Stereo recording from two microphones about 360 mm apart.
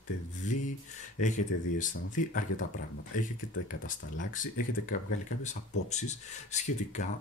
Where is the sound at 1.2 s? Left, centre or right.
Centre.